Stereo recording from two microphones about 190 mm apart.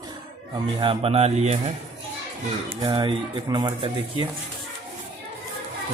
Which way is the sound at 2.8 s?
20° right (ahead or behind).